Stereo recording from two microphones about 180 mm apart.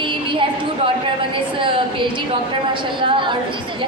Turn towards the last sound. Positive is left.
turn(degrees=-25)  # may be behind; listen again after turning